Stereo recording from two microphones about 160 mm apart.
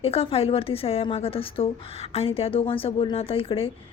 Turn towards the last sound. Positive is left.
turn(degrees=35)  # may be behind; listen again after turning